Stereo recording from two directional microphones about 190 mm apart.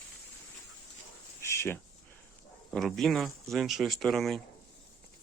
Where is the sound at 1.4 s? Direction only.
15° left (ahead or behind).